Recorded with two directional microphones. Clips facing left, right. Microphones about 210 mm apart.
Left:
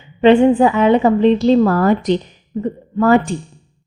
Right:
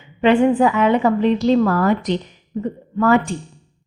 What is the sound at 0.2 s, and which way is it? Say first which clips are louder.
A woman's voice: left 4 dB; 25° left (ahead or behind).